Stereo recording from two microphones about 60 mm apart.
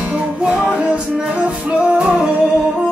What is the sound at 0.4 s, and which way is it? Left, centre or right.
Music, centre.